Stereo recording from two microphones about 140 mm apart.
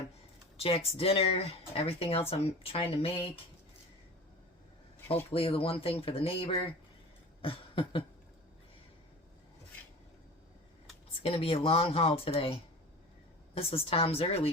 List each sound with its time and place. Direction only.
0.5 s speech: 45° left (ahead or behind)
5.3 s speech: 40° left (ahead or behind)
7.4 s a sound: 40° left (ahead or behind)
11.2 s speech: 45° left (ahead or behind)